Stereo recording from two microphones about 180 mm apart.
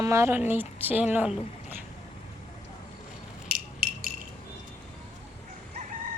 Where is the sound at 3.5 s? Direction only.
55° right (ahead or behind).